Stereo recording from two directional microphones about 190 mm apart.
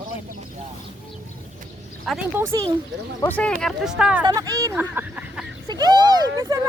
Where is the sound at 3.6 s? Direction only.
5° right (ahead or behind).